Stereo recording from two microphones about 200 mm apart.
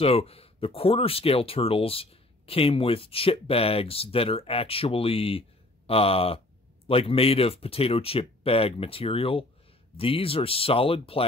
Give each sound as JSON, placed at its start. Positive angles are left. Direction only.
{"t": 0.0, "sound": "speech", "side_deg": 30}